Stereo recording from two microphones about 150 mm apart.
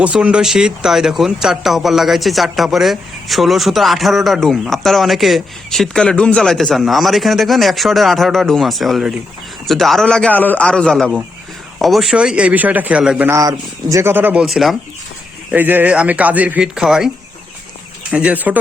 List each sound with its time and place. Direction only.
0.0 s a man's voice: 5° right (ahead or behind)
14.4 s speech: centre (ahead or behind)
15.5 s a man's voice: 10° right (ahead or behind)
18.1 s a man's voice: 10° right (ahead or behind)